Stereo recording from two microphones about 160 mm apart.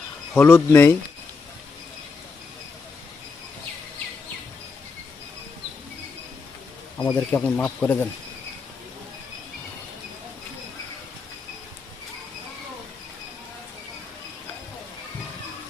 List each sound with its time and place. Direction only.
0.3 s speech: 15° left (ahead or behind)
7.0 s speech: 15° left (ahead or behind)